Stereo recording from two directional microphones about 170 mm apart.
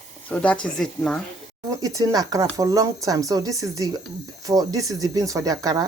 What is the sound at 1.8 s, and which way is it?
Speech, 20° right (ahead or behind).